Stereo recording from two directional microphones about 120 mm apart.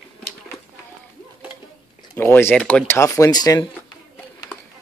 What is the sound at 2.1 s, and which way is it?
Speech, 20° left (ahead or behind).